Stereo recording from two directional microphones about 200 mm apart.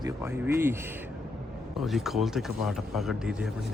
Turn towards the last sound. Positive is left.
turn(degrees=-5)  # may be behind; listen again after turning